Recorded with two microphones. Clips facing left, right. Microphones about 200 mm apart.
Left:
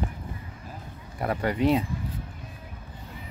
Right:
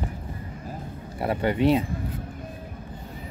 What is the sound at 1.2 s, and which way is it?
Speech, 25° right (ahead or behind).